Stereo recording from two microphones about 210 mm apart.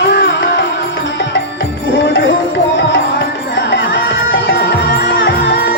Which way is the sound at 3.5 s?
60° left (ahead or behind).